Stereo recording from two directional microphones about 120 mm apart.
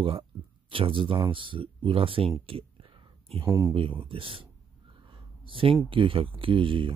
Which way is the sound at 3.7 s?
45° right (ahead or behind).